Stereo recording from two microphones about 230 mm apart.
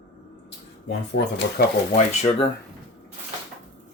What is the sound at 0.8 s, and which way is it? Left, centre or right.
Speech, left.